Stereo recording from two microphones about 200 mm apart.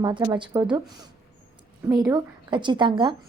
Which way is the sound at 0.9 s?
20° right (ahead or behind).